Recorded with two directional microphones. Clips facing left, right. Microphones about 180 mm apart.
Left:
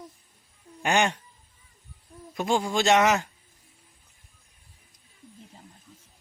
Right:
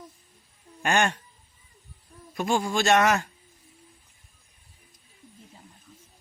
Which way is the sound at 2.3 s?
15° left (ahead or behind).